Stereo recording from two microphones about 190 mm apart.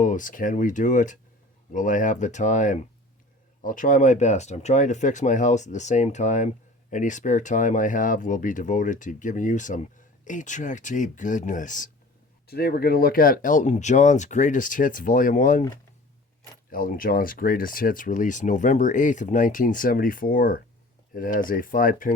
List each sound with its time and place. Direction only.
0.0 s speech: 40° left (ahead or behind)
12.5 s speech: 55° left (ahead or behind)
16.6 s speech: 45° left (ahead or behind)